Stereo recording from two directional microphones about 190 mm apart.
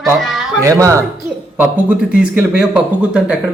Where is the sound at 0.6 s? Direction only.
15° right (ahead or behind).